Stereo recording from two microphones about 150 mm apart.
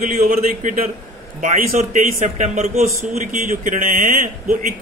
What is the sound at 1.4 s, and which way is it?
A man's voice, 60° right (ahead or behind).